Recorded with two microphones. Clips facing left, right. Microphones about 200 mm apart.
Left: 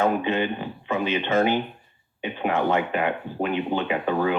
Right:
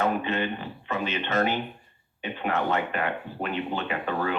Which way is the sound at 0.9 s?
10° left (ahead or behind).